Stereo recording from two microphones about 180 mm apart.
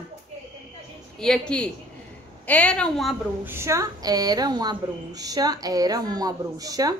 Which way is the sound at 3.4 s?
15° right (ahead or behind).